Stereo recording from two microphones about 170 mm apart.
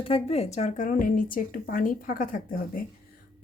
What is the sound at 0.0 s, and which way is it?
Speech, 35° left (ahead or behind).